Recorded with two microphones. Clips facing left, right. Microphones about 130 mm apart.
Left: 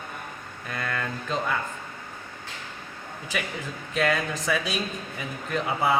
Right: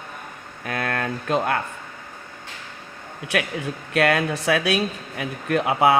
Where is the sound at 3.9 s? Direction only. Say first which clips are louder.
Right 5 dB; 70° right (ahead or behind).